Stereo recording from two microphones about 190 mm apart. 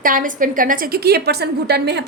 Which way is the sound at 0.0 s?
45° right (ahead or behind).